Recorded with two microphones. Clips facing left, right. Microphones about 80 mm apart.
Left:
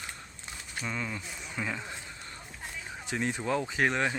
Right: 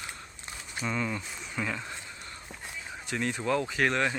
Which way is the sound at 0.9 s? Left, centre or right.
Centre.